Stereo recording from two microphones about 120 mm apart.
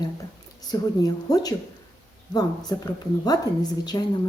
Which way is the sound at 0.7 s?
35° left (ahead or behind).